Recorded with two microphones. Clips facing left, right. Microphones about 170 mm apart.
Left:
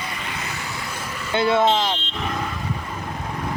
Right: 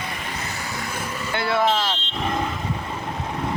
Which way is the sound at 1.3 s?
20° left (ahead or behind).